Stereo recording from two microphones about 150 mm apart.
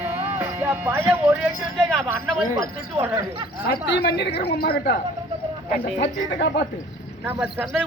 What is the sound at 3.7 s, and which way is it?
A woman's voice, 90° left.